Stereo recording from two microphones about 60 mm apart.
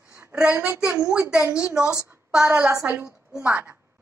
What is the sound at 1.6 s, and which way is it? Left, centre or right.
A woman's voice, centre.